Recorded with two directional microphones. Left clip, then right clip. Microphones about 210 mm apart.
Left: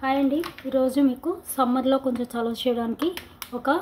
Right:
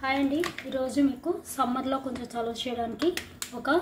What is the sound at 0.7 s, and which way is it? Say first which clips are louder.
Speech: left 7 dB; 50° left (ahead or behind).